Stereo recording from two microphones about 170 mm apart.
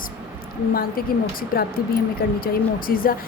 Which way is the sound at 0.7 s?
60° left (ahead or behind).